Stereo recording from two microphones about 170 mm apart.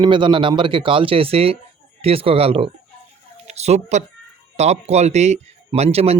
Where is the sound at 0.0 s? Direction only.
30° right (ahead or behind).